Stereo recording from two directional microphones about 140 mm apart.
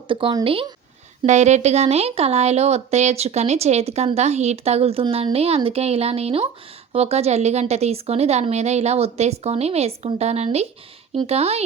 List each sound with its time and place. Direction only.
0.1 s speech: 35° right (ahead or behind)
1.2 s speech: 55° right (ahead or behind)